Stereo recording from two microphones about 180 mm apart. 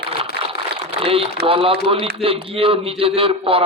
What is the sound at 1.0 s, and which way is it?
Speech, 30° right (ahead or behind).